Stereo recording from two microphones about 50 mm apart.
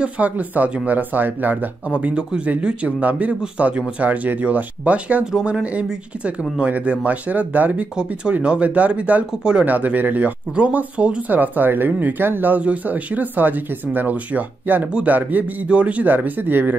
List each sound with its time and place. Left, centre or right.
0.0 s speech: right
1.9 s speech: right
7.9 s speech: right
9.3 s speech: centre
9.7 s speech: right
11.3 s speech: right